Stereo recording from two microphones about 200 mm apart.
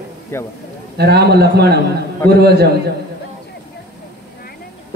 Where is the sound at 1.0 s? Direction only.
55° right (ahead or behind).